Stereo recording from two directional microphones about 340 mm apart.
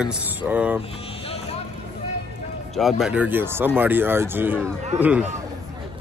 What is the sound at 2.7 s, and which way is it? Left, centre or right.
Speech, centre.